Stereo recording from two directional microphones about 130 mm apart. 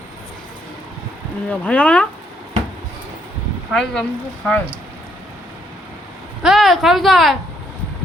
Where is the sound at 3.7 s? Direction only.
5° left (ahead or behind).